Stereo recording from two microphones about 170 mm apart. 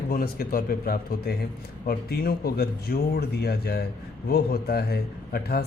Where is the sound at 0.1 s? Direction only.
60° left (ahead or behind).